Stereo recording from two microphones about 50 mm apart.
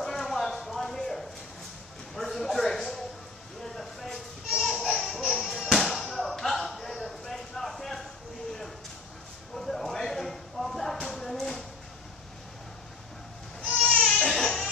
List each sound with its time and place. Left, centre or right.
0.0 s clip-clop: centre
2.1 s a sound: centre
14.0 s baby cry: centre